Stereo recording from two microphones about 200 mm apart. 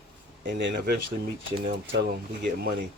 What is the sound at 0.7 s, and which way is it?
Speech, 55° right (ahead or behind).